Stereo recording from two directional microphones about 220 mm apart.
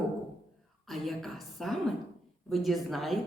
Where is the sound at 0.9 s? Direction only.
Centre (ahead or behind).